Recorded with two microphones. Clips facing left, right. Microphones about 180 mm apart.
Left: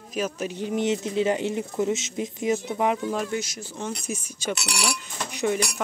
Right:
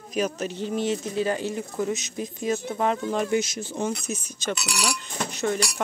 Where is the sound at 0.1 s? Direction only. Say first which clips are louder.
Right 2 dB; 5° left (ahead or behind).